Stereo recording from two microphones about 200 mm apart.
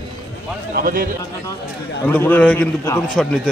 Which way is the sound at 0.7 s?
45° right (ahead or behind).